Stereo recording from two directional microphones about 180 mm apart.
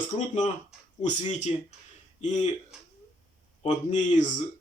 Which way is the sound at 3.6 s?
40° left (ahead or behind).